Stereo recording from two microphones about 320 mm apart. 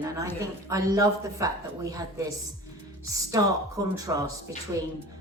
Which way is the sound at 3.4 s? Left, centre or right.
Centre.